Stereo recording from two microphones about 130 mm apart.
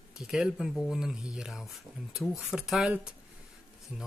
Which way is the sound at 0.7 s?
5° left (ahead or behind).